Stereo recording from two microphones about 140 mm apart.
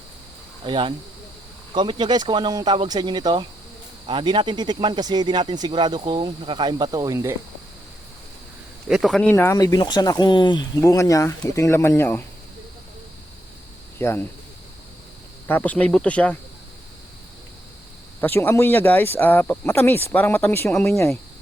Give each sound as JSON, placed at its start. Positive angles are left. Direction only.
{"t": 0.6, "sound": "speech", "side_deg": -35}
{"t": 8.9, "sound": "speech", "side_deg": 0}
{"t": 9.3, "sound": "speech", "side_deg": 15}
{"t": 9.6, "sound": "speech", "side_deg": 30}
{"t": 14.0, "sound": "speech", "side_deg": 20}
{"t": 15.4, "sound": "speech", "side_deg": 10}
{"t": 18.2, "sound": "speech", "side_deg": 15}